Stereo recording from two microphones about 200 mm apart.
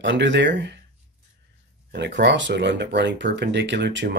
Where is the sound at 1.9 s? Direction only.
60° right (ahead or behind).